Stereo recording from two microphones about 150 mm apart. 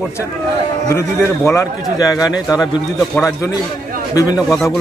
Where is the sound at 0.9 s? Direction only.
20° left (ahead or behind).